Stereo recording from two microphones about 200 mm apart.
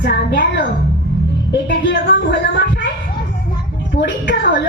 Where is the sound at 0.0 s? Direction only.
60° left (ahead or behind).